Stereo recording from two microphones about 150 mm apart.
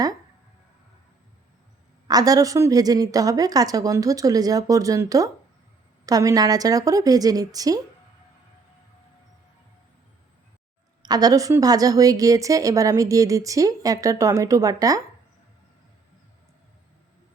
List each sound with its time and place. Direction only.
2.0 s a woman's voice: 25° right (ahead or behind)
11.0 s a woman's voice: 25° right (ahead or behind)